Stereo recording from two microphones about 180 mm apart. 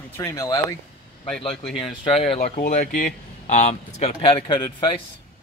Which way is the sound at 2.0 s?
30° left (ahead or behind).